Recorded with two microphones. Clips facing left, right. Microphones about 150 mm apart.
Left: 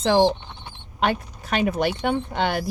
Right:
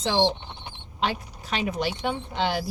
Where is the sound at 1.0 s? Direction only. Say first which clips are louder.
Left 5 dB; 55° left (ahead or behind).